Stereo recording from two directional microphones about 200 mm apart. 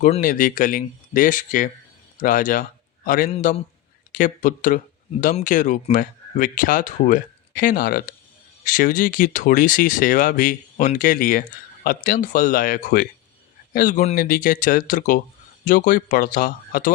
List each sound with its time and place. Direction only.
0.0 s a man's voice: 40° left (ahead or behind)